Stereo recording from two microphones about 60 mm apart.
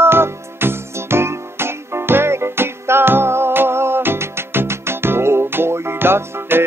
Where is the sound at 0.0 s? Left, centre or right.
Right.